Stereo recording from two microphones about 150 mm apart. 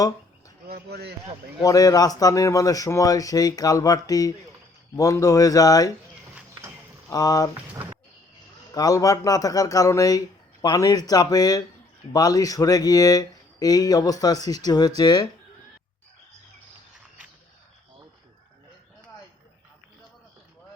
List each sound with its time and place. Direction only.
0.7 s speech: 90° right
1.6 s speech: 25° left (ahead or behind)
7.1 s speech: 25° left (ahead or behind)
8.7 s speech: 25° left (ahead or behind)